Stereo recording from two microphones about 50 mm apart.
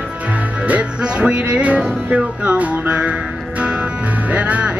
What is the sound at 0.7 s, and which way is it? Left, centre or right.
Music, right.